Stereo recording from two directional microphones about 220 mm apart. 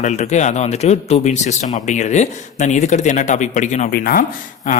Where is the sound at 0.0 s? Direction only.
30° left (ahead or behind).